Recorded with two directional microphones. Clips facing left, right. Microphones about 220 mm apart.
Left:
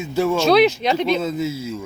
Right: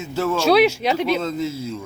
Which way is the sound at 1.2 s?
10° left (ahead or behind).